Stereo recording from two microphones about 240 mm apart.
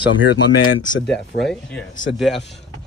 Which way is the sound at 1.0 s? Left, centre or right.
Centre.